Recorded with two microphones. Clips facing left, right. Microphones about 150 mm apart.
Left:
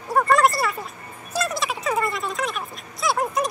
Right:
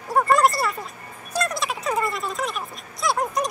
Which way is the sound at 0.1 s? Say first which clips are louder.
Even; centre (ahead or behind).